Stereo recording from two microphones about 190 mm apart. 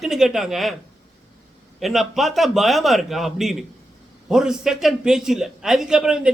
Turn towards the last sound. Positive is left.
turn(degrees=-5)  # may be behind; listen again after turning